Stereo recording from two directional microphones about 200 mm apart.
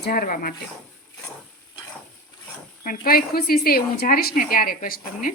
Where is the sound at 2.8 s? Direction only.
50° left (ahead or behind).